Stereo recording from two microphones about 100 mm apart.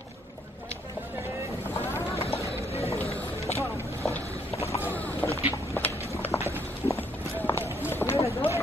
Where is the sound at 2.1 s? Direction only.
90° left.